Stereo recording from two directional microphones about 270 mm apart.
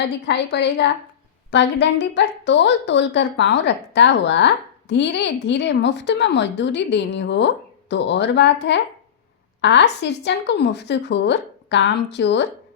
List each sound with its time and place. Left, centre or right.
0.3 s a woman's voice: left